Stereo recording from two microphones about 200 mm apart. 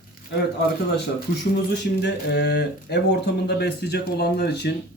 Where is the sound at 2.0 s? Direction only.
55° left (ahead or behind).